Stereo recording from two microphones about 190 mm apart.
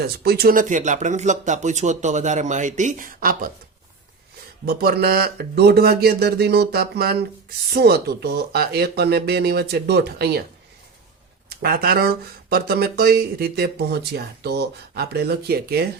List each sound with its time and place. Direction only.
0.0 s speech: 55° right (ahead or behind)
4.6 s speech: 50° right (ahead or behind)
11.4 s speech: 50° right (ahead or behind)